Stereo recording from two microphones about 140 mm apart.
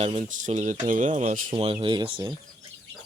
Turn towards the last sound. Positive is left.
turn(degrees=-35)  # may be behind; listen again after turning